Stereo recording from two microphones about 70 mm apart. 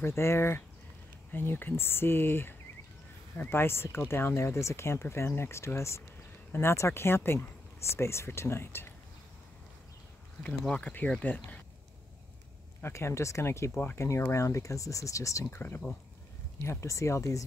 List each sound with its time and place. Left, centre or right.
0.0 s speech: left
10.8 s speech: left
12.8 s speech: left
15.5 s speech: left
16.8 s speech: left